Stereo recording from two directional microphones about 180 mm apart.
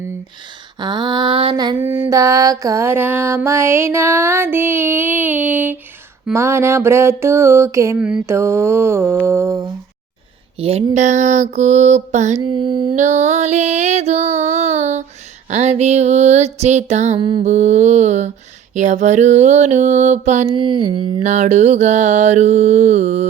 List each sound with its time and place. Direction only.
0.8 s mantra: 25° right (ahead or behind)
1.8 s music: 10° right (ahead or behind)
7.9 s music: 5° right (ahead or behind)
10.6 s mantra: 35° right (ahead or behind)
12.5 s music: 25° right (ahead or behind)
13.0 s mantra: 40° right (ahead or behind)
17.4 s mantra: 40° right (ahead or behind)
20.6 s mantra: 30° right (ahead or behind)